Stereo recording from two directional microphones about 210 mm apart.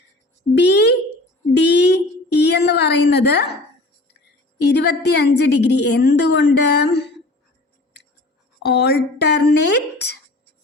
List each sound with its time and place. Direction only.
0.5 s speech: 55° left (ahead or behind)
4.7 s a woman's voice: 50° left (ahead or behind)
8.6 s a woman's voice: 55° left (ahead or behind)